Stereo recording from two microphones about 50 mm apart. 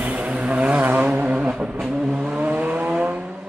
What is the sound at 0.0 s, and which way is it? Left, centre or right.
Vehicle, right.